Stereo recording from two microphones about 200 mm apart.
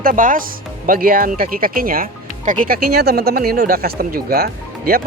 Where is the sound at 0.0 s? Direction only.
40° right (ahead or behind).